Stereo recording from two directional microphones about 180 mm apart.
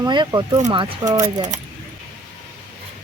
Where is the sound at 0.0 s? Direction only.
25° right (ahead or behind).